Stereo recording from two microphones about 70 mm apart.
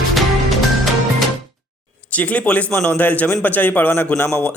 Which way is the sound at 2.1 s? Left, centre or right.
Left.